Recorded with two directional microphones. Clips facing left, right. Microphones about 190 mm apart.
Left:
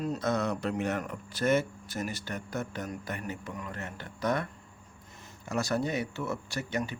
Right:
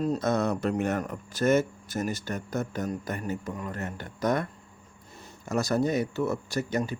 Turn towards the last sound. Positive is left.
turn(degrees=-40)  # may be behind; listen again after turning